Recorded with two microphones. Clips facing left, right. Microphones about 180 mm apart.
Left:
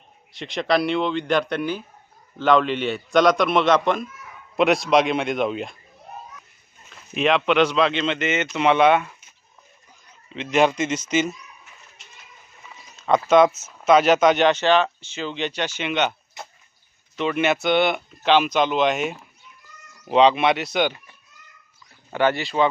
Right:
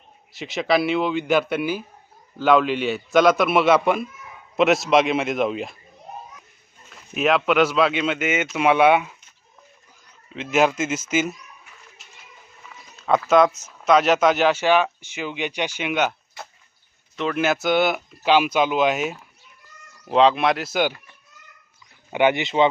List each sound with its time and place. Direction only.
0.3 s speech: 5° right (ahead or behind)
6.9 s speech: 5° right (ahead or behind)
10.3 s speech: 5° right (ahead or behind)
12.0 s a sound: 5° right (ahead or behind)
13.1 s speech: centre (ahead or behind)
17.2 s speech: centre (ahead or behind)
22.1 s speech: 15° right (ahead or behind)